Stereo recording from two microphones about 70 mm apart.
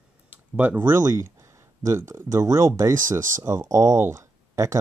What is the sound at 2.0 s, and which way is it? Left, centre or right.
Speech, right.